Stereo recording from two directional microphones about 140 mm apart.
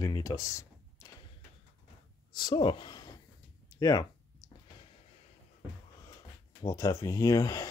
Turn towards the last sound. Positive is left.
turn(degrees=25)  # may be behind; listen again after turning